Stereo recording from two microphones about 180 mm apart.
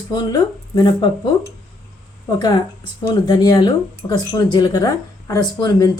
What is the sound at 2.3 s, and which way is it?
Speech, 20° left (ahead or behind).